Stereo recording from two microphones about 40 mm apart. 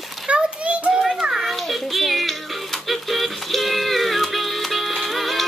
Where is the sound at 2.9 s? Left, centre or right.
Centre.